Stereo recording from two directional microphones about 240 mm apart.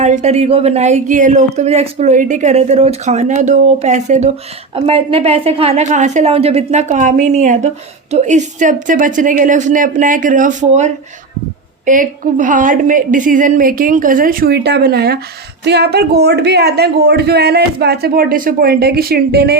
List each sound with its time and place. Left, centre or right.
0.0 s a woman's voice: right